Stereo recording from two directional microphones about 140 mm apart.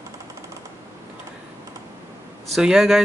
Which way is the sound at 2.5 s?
5° right (ahead or behind).